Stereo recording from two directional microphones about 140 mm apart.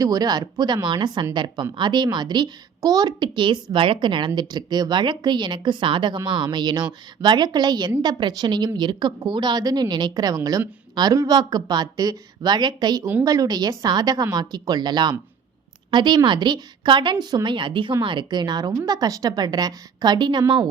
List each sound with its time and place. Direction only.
0.0 s a woman's voice: 25° right (ahead or behind)